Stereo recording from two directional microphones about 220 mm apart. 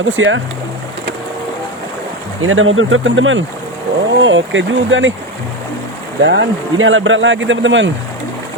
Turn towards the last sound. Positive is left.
turn(degrees=-55)  # may be behind; listen again after turning